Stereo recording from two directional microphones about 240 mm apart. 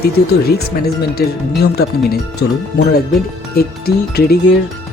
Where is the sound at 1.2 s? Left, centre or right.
Left.